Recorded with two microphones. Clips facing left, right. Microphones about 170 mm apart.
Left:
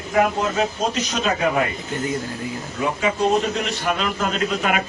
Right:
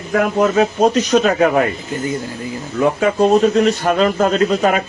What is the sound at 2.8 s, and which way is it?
Speech, 55° right (ahead or behind).